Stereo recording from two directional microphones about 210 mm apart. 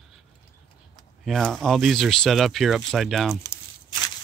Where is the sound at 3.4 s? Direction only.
15° left (ahead or behind).